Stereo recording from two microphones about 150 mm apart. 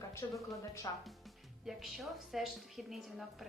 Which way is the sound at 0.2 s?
20° left (ahead or behind).